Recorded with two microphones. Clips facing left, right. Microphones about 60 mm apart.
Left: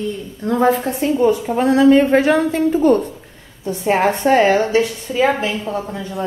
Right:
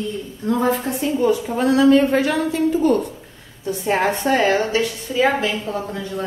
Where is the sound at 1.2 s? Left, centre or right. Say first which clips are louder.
Left 3 dB; left.